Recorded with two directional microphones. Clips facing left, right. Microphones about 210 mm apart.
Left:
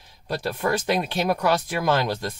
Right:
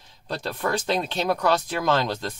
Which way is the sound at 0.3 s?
10° left (ahead or behind).